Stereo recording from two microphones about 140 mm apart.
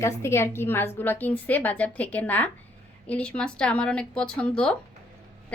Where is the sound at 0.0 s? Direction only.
20° left (ahead or behind).